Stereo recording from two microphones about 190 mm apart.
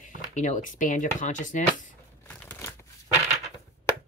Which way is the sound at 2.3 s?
10° left (ahead or behind).